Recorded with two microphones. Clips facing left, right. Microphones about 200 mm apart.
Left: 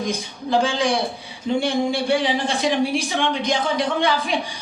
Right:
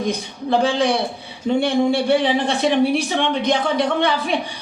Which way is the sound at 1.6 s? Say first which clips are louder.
Right 5 dB; 60° right (ahead or behind).